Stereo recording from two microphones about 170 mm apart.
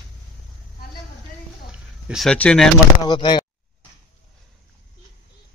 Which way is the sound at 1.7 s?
5° right (ahead or behind).